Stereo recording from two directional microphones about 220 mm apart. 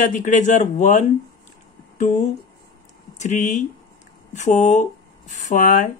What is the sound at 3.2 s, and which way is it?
Speech, 30° left (ahead or behind).